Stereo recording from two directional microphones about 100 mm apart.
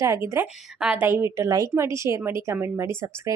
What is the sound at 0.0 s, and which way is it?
Speech, 30° right (ahead or behind).